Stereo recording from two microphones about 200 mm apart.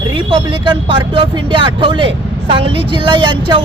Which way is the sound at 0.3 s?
25° right (ahead or behind).